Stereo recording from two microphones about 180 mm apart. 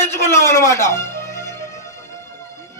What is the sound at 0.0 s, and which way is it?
Speech, 15° left (ahead or behind).